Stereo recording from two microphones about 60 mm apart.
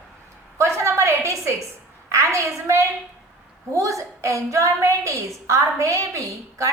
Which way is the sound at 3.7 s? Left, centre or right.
Right.